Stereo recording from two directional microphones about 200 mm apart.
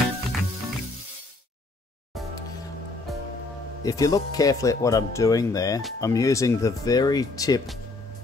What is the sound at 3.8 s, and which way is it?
Speech, 15° left (ahead or behind).